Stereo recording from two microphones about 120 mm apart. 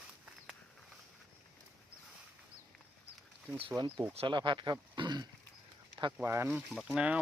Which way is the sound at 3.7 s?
25° right (ahead or behind).